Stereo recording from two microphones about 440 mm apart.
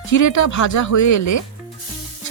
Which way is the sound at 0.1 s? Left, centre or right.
Left.